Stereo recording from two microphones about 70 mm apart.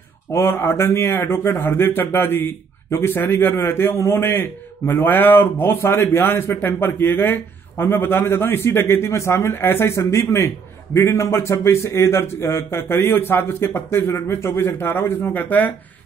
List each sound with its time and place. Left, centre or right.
0.3 s speech: left